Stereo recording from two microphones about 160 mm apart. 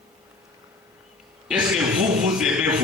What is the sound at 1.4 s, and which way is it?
A man's voice, 5° right (ahead or behind).